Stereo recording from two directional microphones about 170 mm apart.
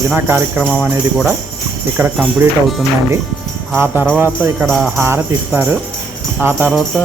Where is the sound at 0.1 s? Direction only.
10° right (ahead or behind).